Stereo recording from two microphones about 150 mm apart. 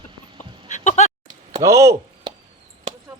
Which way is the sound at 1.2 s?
25° right (ahead or behind).